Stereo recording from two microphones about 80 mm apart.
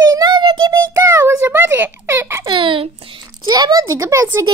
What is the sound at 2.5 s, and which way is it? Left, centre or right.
Speech, right.